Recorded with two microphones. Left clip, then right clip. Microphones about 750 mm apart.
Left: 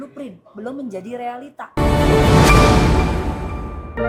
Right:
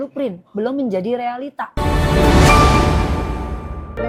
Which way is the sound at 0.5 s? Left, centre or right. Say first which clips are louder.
Right 7 dB; right.